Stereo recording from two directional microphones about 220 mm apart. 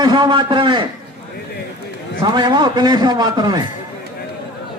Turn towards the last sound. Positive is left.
turn(degrees=-20)  # may be behind; listen again after turning